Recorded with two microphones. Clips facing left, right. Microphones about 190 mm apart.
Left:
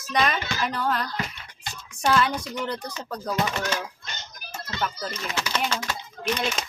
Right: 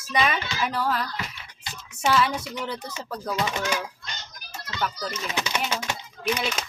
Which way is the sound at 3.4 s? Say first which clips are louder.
Right 1 dB; 20° right (ahead or behind).